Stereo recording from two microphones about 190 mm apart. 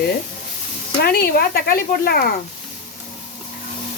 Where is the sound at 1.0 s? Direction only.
50° left (ahead or behind).